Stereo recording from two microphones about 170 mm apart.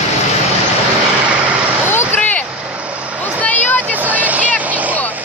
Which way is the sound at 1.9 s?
10° left (ahead or behind).